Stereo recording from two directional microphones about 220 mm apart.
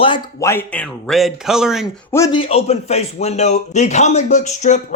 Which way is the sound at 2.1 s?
15° left (ahead or behind).